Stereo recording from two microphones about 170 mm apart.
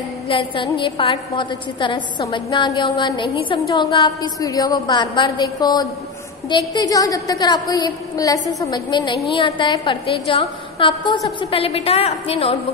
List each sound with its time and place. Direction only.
0.3 s a woman's voice: 30° left (ahead or behind)